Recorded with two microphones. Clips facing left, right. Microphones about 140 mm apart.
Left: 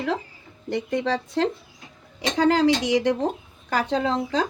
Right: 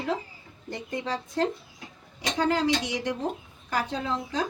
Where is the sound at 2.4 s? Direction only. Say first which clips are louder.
Left 6 dB; 90° left.